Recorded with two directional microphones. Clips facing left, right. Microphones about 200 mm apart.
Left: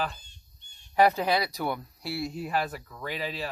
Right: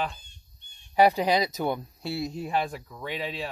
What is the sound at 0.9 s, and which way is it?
Speech, 15° right (ahead or behind).